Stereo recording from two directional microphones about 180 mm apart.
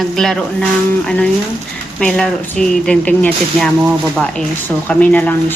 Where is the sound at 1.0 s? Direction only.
5° left (ahead or behind).